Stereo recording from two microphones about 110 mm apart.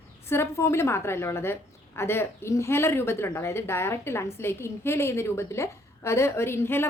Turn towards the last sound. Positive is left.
turn(degrees=20)  # may be behind; listen again after turning